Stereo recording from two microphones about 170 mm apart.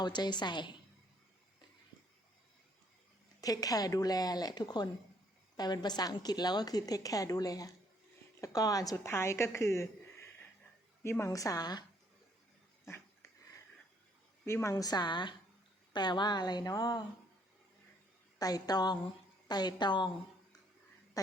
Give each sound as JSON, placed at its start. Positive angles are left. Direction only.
{"t": 0.0, "sound": "a woman's voice", "side_deg": 25}
{"t": 3.4, "sound": "a woman's voice", "side_deg": 20}
{"t": 12.8, "sound": "dog", "side_deg": 15}
{"t": 14.4, "sound": "a woman's voice", "side_deg": 15}
{"t": 18.3, "sound": "a woman's voice", "side_deg": 20}